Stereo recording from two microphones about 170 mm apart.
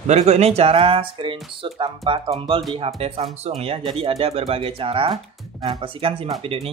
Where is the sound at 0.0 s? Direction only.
40° right (ahead or behind).